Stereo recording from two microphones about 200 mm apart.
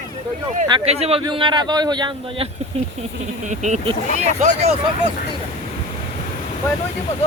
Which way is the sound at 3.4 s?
35° right (ahead or behind).